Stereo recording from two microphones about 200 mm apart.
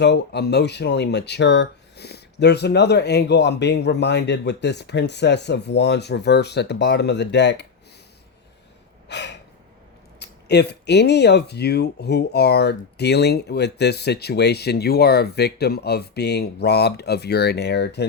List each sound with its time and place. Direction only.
0.0 s speech: 55° left (ahead or behind)
9.0 s gasp: 60° left (ahead or behind)
10.2 s speech: 55° left (ahead or behind)